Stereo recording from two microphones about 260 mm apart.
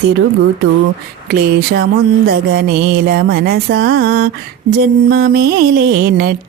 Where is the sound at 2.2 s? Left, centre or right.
Right.